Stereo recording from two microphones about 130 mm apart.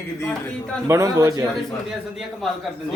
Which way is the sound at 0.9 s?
20° right (ahead or behind).